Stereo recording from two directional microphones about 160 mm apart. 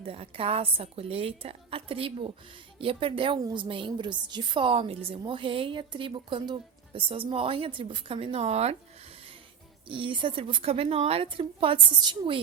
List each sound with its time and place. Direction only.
0.0 s a woman's voice: 35° right (ahead or behind)
9.8 s a woman's voice: 30° right (ahead or behind)